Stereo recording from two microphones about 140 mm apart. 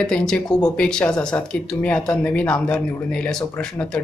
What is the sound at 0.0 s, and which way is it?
Speech, 5° left (ahead or behind).